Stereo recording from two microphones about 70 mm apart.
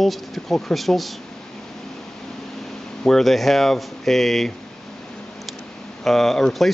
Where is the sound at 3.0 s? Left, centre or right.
Centre.